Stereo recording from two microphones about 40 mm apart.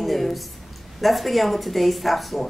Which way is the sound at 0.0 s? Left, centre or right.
Centre.